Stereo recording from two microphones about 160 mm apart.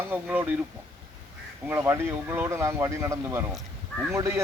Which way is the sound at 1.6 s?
10° right (ahead or behind).